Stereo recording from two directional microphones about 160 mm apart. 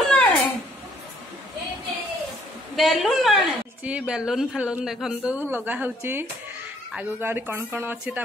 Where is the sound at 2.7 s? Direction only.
Centre (ahead or behind).